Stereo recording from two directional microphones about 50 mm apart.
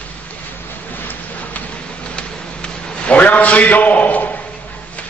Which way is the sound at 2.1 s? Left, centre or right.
Left.